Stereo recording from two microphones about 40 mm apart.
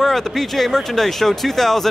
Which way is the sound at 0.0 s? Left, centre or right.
Centre.